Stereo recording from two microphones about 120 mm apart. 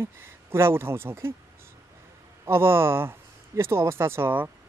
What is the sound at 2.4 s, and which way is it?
A man's voice, 20° right (ahead or behind).